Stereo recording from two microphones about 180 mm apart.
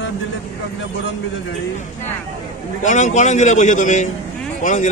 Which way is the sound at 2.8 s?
40° left (ahead or behind).